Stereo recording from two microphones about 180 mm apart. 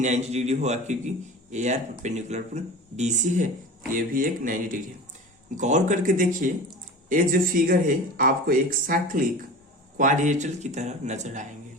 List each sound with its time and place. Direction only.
0.0 s a man's voice: 40° right (ahead or behind)